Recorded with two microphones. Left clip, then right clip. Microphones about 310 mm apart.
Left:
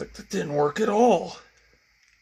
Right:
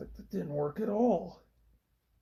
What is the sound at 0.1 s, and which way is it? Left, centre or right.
Speech, left.